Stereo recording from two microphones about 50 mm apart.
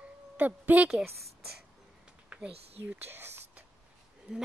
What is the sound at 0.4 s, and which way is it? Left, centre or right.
Speech, right.